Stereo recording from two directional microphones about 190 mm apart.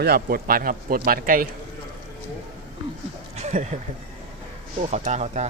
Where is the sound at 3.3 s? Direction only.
35° right (ahead or behind).